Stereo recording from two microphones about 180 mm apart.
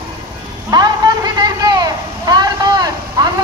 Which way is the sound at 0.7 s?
20° right (ahead or behind).